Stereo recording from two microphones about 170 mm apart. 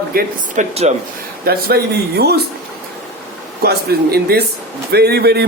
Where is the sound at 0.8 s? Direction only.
40° right (ahead or behind).